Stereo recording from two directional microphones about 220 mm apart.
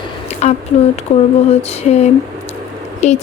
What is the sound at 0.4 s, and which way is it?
Speech, 30° left (ahead or behind).